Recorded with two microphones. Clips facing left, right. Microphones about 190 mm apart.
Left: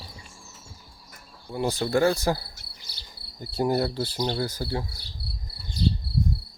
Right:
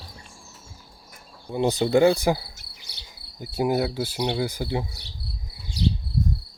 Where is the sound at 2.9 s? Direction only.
65° right (ahead or behind).